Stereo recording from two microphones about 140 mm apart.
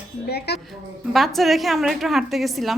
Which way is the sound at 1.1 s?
Centre (ahead or behind).